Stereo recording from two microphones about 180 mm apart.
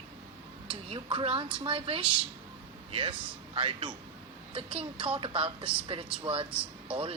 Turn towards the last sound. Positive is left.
turn(degrees=-5)  # may be behind; listen again after turning